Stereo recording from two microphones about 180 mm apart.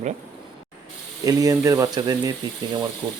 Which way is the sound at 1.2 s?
20° right (ahead or behind).